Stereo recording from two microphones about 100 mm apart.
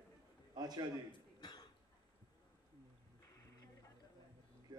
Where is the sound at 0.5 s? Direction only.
40° right (ahead or behind).